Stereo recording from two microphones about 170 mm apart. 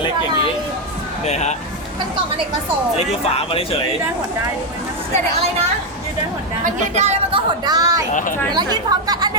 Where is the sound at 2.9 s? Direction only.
35° left (ahead or behind).